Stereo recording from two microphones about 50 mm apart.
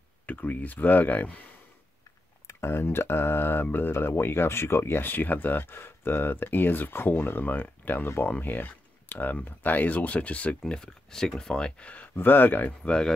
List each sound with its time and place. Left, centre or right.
0.3 s speech: left
2.4 s speech: left
10.7 s speech: centre
12.2 s speech: left
12.8 s speech: centre